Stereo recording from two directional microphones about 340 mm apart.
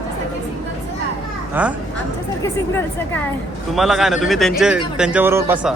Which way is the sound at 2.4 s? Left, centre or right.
Centre.